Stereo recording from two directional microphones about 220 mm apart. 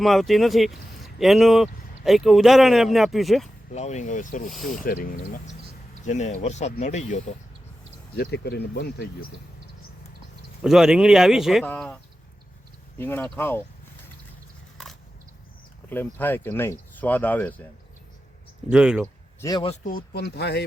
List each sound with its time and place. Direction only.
0.0 s speech: centre (ahead or behind)
3.7 s speech: 30° left (ahead or behind)
8.1 s speech: 50° left (ahead or behind)
10.6 s speech: 5° right (ahead or behind)
13.0 s speech: 10° left (ahead or behind)
15.9 s speech: 10° left (ahead or behind)
18.7 s speech: 5° right (ahead or behind)
19.0 s a man's voice: 15° left (ahead or behind)
19.8 s speech: 40° left (ahead or behind)